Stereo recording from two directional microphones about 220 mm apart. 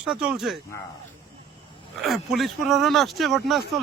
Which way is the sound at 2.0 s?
Centre (ahead or behind).